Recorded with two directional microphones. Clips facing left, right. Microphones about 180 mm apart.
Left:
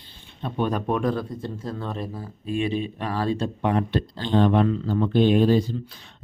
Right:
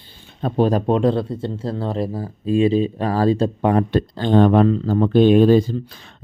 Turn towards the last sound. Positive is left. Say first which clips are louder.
# right 6 dB
turn(degrees=-90)